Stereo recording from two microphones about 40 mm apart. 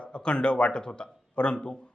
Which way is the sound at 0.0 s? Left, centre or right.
Left.